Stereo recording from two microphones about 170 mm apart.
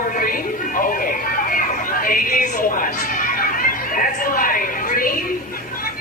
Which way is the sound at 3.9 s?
55° left (ahead or behind).